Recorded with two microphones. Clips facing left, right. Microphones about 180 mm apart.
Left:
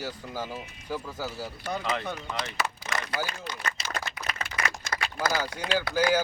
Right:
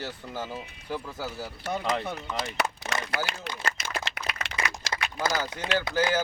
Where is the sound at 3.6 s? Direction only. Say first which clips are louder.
Right 3 dB; 90° right.